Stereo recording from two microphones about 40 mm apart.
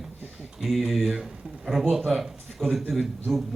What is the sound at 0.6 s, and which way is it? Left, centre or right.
A man's voice, centre.